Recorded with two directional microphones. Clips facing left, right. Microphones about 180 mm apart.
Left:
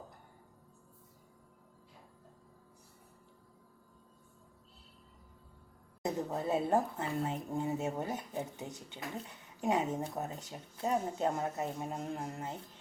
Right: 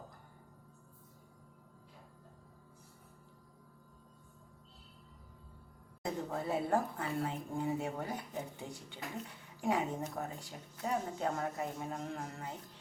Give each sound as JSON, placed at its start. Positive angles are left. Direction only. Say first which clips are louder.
{"t": 6.0, "sound": "speech", "louder": "left 3 dB", "side_deg": 20}